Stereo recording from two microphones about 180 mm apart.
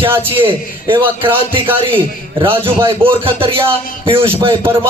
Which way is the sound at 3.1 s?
30° right (ahead or behind).